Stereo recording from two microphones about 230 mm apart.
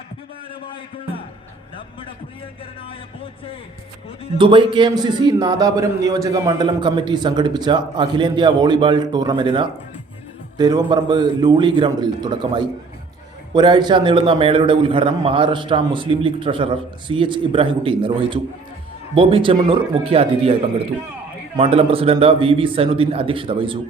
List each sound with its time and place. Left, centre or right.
4.4 s a man's voice: right